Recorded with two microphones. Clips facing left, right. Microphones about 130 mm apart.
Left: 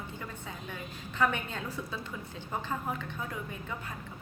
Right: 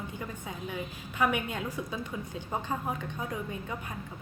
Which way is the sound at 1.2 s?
15° right (ahead or behind).